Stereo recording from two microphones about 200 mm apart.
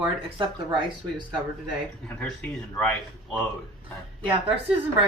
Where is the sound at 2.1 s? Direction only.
5° left (ahead or behind).